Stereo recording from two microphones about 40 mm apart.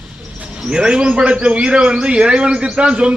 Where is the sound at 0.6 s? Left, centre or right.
Centre.